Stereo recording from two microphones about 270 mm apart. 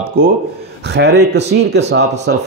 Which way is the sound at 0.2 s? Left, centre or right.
Right.